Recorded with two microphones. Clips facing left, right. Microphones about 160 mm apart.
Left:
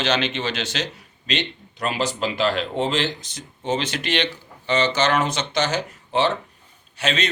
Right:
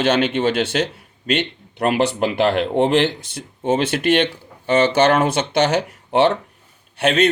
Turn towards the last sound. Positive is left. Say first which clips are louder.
# right 8 dB
turn(degrees=-55)  # may be behind; listen again after turning